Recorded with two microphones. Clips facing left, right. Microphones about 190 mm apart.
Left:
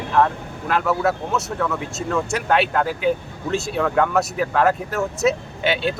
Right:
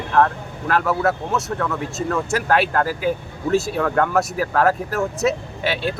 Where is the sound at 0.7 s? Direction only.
Centre (ahead or behind).